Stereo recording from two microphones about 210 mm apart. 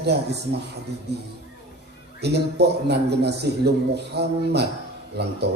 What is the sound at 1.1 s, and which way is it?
A man's voice, 55° right (ahead or behind).